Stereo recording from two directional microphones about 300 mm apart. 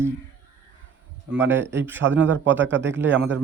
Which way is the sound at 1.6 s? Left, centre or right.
Right.